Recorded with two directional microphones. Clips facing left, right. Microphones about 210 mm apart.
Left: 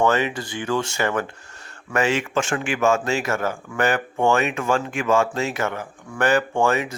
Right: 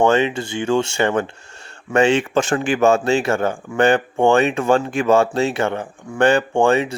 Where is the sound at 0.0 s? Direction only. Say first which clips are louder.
Right 4 dB; 25° right (ahead or behind).